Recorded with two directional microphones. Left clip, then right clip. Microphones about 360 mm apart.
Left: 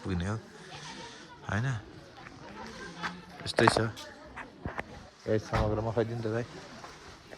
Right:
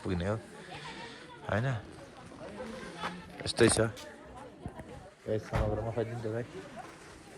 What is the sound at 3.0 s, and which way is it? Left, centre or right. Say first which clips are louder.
Music: left 1 dB; centre.